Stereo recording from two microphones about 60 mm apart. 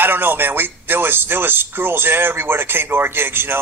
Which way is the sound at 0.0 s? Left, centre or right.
Right.